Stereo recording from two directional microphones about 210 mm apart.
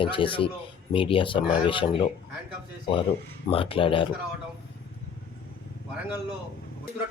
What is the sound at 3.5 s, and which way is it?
Speech, 25° left (ahead or behind).